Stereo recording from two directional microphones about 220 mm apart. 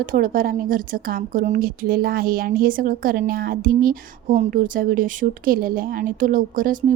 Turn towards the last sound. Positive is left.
turn(degrees=-40)  # may be behind; listen again after turning